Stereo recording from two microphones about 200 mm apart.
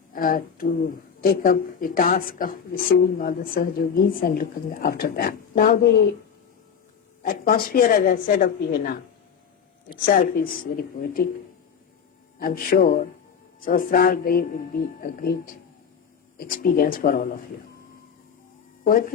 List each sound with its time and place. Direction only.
0.1 s speech: 45° left (ahead or behind)
7.2 s speech: 45° left (ahead or behind)
10.1 s speech: 45° left (ahead or behind)
12.4 s speech: 45° left (ahead or behind)
18.9 s speech: 45° left (ahead or behind)